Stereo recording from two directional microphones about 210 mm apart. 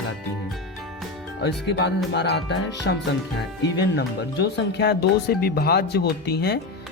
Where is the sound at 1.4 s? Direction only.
55° left (ahead or behind).